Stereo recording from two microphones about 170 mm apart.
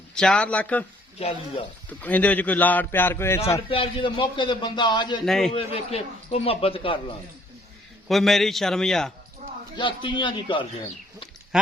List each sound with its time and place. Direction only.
0.1 s a man's voice: 5° left (ahead or behind)
1.2 s a man's voice: 30° left (ahead or behind)
1.9 s a man's voice: 10° left (ahead or behind)
3.7 s a man's voice: 30° left (ahead or behind)
5.2 s a man's voice: centre (ahead or behind)
5.5 s a man's voice: 35° left (ahead or behind)
8.0 s a man's voice: centre (ahead or behind)
9.7 s a man's voice: 30° left (ahead or behind)
11.5 s a sound: 5° right (ahead or behind)